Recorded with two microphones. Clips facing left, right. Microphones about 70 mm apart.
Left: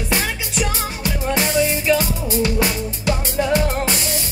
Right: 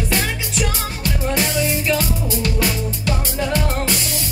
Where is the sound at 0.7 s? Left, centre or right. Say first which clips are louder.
Left 1 dB; left.